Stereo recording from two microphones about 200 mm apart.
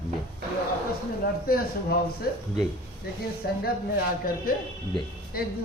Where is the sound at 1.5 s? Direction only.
50° left (ahead or behind).